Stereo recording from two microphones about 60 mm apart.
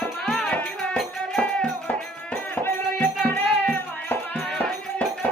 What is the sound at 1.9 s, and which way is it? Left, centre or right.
Music, left.